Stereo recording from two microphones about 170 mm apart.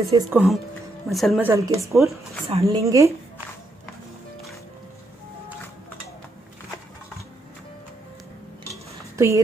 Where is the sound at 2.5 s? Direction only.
35° right (ahead or behind).